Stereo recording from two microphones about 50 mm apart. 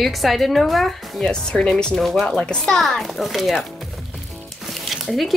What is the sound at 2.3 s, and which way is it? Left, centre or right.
Speech, centre.